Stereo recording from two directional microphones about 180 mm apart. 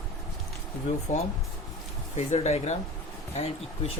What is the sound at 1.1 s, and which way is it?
Speech, 45° left (ahead or behind).